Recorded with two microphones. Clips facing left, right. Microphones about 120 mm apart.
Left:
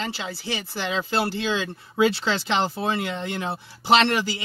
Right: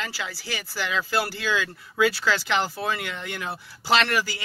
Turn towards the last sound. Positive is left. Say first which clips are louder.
# left 3 dB
turn(degrees=25)  # may be behind; listen again after turning